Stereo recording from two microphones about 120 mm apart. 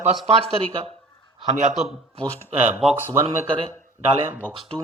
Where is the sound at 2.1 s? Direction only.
55° right (ahead or behind).